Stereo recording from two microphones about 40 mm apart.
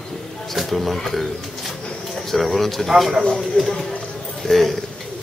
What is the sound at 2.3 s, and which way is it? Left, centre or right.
Speech, centre.